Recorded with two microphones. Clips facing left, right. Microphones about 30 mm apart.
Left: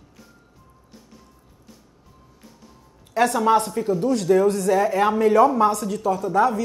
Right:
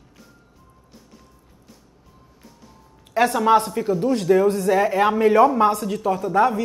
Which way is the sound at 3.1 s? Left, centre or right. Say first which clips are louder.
Right 1 dB; centre.